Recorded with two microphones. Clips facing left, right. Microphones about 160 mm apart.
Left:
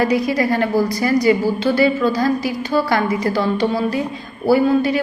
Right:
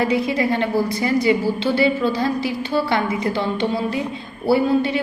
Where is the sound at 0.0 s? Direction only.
25° right (ahead or behind).